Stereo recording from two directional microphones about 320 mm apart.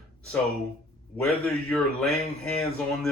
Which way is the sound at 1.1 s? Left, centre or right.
Centre.